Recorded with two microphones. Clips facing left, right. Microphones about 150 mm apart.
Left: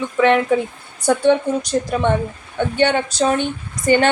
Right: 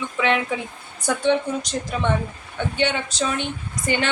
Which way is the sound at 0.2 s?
45° left (ahead or behind).